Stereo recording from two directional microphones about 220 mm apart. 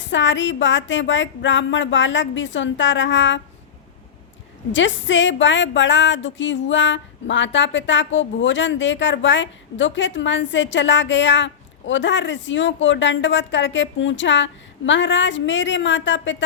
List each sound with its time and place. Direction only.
0.0 s a woman's voice: 55° left (ahead or behind)
4.7 s a woman's voice: 55° left (ahead or behind)